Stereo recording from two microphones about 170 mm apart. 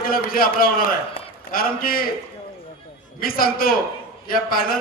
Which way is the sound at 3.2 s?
60° left (ahead or behind).